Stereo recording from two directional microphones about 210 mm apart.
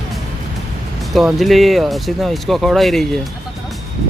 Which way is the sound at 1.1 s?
Centre (ahead or behind).